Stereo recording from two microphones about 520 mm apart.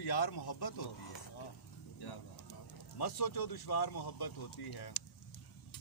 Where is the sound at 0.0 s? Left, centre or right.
Left.